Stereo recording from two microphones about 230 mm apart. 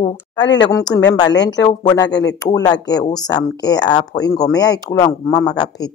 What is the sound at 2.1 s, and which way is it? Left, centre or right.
Speech, left.